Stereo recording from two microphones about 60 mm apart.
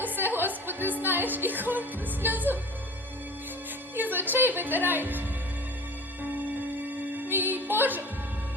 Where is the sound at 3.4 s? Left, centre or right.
Right.